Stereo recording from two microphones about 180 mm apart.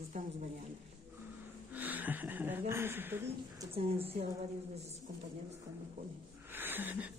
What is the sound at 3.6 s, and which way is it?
Speech, 30° right (ahead or behind).